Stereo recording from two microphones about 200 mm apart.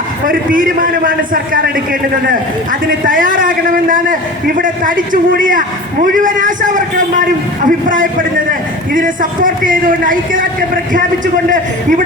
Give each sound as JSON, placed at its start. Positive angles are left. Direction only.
{"t": 0.3, "sound": "a man's voice", "side_deg": -45}
{"t": 3.1, "sound": "a man's voice", "side_deg": -45}
{"t": 11.5, "sound": "a man's voice", "side_deg": -40}